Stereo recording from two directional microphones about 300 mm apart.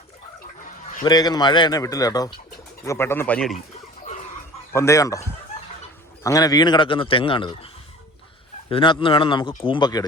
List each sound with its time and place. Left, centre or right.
1.0 s a man's voice: centre
4.7 s a man's voice: centre
8.7 s a man's voice: centre